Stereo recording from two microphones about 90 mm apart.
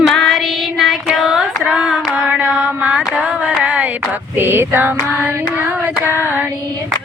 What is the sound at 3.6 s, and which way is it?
Female singing, 15° right (ahead or behind).